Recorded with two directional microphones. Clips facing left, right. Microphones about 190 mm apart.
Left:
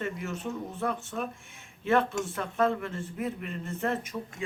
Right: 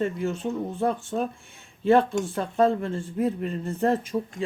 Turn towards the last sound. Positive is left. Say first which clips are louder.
# right 7 dB
turn(degrees=-30)  # may be behind; listen again after turning